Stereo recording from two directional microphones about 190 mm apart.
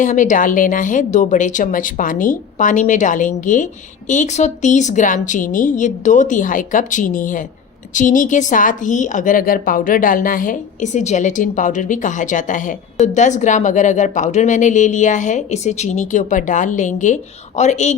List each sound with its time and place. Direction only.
0.0 s a woman's voice: 40° left (ahead or behind)